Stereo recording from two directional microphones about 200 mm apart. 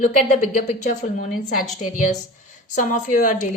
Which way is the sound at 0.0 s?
35° left (ahead or behind).